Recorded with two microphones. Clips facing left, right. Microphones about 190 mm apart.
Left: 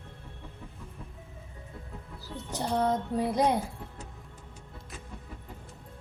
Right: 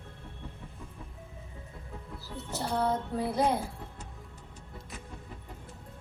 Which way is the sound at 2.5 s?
15° left (ahead or behind).